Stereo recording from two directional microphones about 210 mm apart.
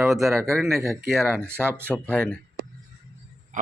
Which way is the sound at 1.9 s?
5° left (ahead or behind).